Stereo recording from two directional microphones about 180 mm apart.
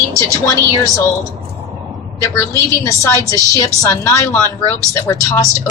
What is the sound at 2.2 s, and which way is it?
Speech, 15° left (ahead or behind).